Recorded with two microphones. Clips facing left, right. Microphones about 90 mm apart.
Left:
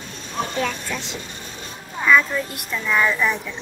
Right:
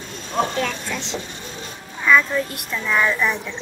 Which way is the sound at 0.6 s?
5° left (ahead or behind).